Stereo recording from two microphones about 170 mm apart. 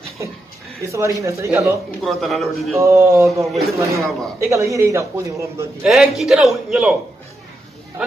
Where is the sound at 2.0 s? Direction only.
Centre (ahead or behind).